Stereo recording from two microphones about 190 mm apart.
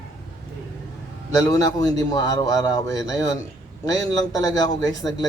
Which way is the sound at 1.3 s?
15° left (ahead or behind).